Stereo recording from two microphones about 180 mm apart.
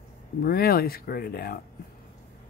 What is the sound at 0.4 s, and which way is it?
Speech, 55° left (ahead or behind).